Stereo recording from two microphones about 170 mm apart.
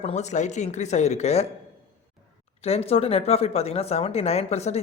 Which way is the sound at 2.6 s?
35° left (ahead or behind).